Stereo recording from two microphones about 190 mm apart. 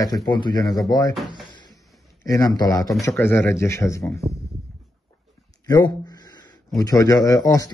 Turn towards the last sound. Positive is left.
turn(degrees=20)  # may be behind; listen again after turning